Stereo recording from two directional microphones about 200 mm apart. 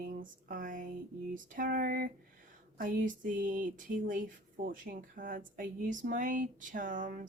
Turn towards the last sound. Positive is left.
turn(degrees=-45)  # may be behind; listen again after turning